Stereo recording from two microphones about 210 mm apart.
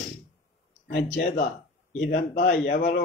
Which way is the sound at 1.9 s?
50° left (ahead or behind).